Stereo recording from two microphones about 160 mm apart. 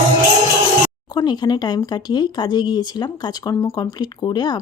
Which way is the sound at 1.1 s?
25° left (ahead or behind).